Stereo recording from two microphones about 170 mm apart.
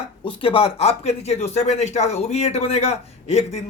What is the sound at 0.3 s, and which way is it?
Speech, 30° left (ahead or behind).